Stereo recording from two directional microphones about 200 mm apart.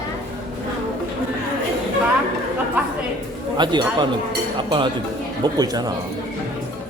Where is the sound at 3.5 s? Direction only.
20° right (ahead or behind).